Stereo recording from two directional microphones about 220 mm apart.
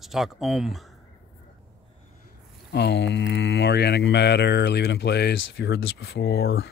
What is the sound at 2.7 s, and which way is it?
Speech, 50° left (ahead or behind).